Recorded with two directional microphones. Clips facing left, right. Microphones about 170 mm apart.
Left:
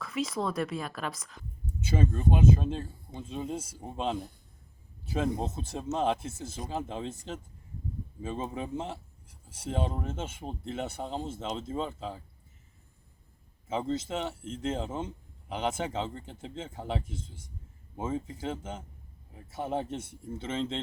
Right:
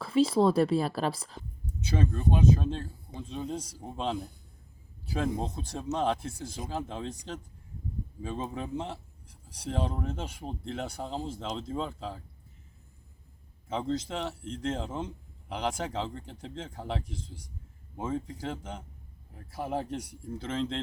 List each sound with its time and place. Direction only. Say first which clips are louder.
0.0 s a woman's voice: right 8 dB; 30° right (ahead or behind)
1.9 s speech: left 1 dB; 5° left (ahead or behind)
13.7 s speech: even; 5° left (ahead or behind)